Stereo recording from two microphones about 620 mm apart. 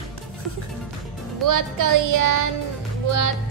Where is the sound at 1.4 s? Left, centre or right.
Right.